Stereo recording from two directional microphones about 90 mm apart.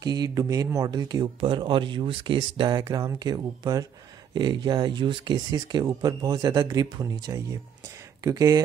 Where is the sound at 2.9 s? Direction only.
35° right (ahead or behind).